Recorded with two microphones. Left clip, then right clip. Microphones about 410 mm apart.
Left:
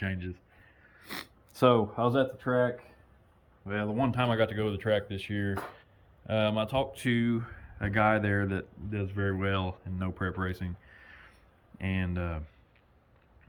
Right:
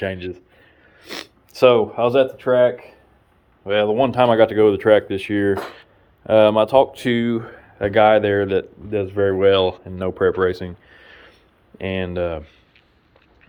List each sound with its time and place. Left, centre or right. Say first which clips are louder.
0.0 s speech: right 12 dB; centre
6.3 s speech: right 16 dB; centre
10.2 s a sound: right 19 dB; centre
11.8 s speech: right 13 dB; centre